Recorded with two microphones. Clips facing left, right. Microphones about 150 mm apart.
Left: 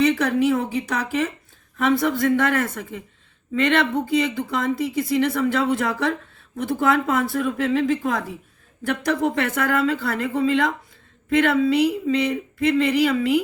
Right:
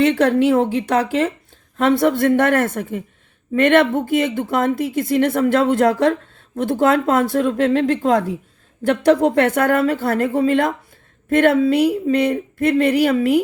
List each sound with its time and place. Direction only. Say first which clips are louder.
0.1 s speech: right 5 dB; 70° right (ahead or behind)
9.2 s speech: right 6 dB; 65° right (ahead or behind)